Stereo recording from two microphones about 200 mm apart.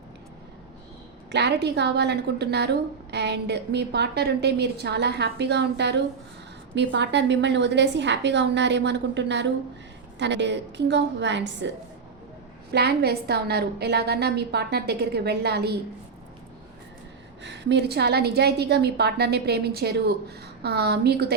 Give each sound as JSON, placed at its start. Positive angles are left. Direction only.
{"t": 1.3, "sound": "a woman's voice", "side_deg": -60}
{"t": 12.7, "sound": "a woman's voice", "side_deg": -55}
{"t": 17.4, "sound": "a woman's voice", "side_deg": -60}